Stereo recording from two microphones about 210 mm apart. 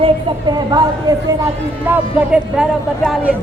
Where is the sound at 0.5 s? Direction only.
20° right (ahead or behind).